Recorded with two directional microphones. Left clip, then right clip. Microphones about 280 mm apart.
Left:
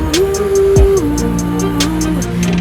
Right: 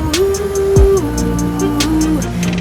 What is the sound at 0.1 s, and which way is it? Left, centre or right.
Music, centre.